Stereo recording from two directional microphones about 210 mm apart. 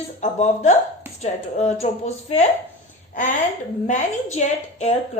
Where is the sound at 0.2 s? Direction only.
35° left (ahead or behind).